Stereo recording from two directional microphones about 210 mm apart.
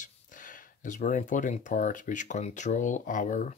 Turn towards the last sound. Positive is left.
turn(degrees=40)  # may be behind; listen again after turning